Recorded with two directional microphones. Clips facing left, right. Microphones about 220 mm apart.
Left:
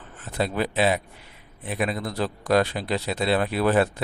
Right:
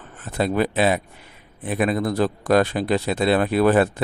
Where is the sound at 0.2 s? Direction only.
50° right (ahead or behind).